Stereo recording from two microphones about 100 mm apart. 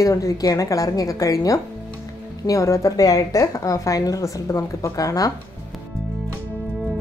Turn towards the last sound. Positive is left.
turn(degrees=35)  # may be behind; listen again after turning